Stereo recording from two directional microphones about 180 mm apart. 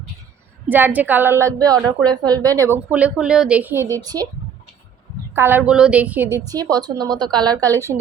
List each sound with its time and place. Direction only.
0.7 s a woman's voice: 10° right (ahead or behind)
5.3 s a woman's voice: 10° right (ahead or behind)
6.3 s a woman's voice: 20° right (ahead or behind)
7.9 s a woman's voice: 10° right (ahead or behind)